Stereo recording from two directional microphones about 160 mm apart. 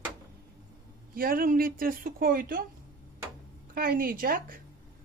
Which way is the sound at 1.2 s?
65° right (ahead or behind).